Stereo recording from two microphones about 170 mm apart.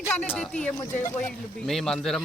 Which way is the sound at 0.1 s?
5° left (ahead or behind).